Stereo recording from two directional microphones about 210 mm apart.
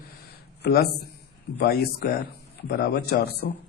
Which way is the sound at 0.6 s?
50° left (ahead or behind).